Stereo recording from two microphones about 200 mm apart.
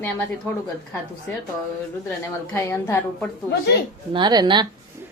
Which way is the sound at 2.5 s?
10° left (ahead or behind).